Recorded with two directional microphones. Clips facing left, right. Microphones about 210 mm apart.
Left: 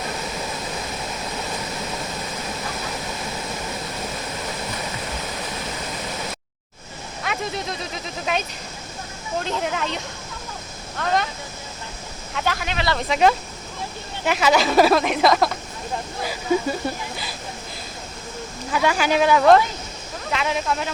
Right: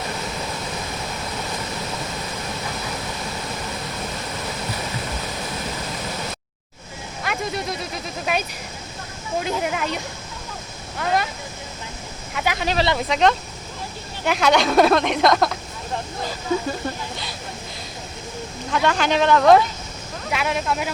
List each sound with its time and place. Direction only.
7.2 s a sound: 5° right (ahead or behind)
8.2 s speech: 5° right (ahead or behind)
12.3 s speech: 5° right (ahead or behind)
12.5 s speech: 30° right (ahead or behind)
13.1 s speech: 5° left (ahead or behind)
16.5 s speech: 15° left (ahead or behind)
18.7 s speech: 5° left (ahead or behind)